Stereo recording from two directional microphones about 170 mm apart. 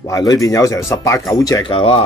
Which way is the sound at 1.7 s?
35° left (ahead or behind).